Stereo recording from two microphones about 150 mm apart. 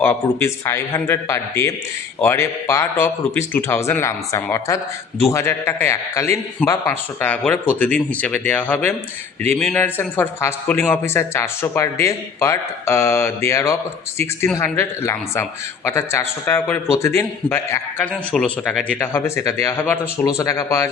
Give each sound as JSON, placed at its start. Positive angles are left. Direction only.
{"t": 0.0, "sound": "a man's voice", "side_deg": 15}
{"t": 18.9, "sound": "a man's voice", "side_deg": 15}